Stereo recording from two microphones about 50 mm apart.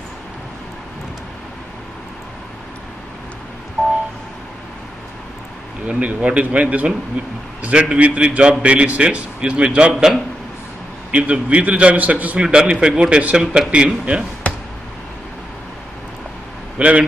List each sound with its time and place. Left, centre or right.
5.9 s a man's voice: right
12.4 s a man's voice: centre
16.7 s a man's voice: right